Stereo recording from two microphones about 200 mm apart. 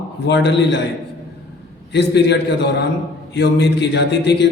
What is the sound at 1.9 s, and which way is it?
A man's voice, 60° left (ahead or behind).